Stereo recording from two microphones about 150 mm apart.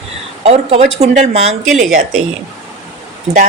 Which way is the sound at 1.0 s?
45° right (ahead or behind).